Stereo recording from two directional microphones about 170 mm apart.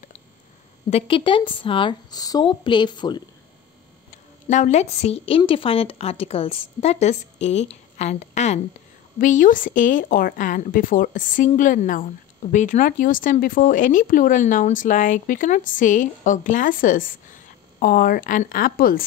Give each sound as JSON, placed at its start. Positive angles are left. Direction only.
{"t": 0.8, "sound": "speech", "side_deg": 35}
{"t": 4.5, "sound": "a woman's voice", "side_deg": 45}